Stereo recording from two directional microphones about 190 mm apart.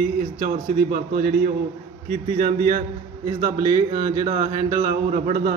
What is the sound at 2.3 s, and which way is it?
Speech, 50° right (ahead or behind).